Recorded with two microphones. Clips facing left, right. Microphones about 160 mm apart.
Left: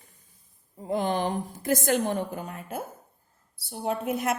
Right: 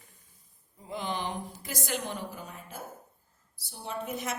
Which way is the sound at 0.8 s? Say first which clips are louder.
Left 8 dB; 50° left (ahead or behind).